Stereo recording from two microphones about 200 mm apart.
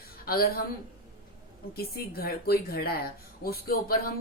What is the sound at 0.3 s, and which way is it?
Speech, 50° left (ahead or behind).